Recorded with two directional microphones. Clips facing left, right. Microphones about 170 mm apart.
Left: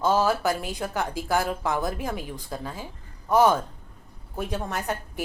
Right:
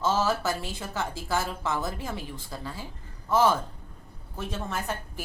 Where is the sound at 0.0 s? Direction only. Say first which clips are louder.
Left 4 dB; 15° left (ahead or behind).